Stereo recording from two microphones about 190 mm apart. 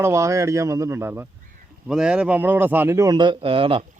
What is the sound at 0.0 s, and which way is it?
A man's voice, 15° right (ahead or behind).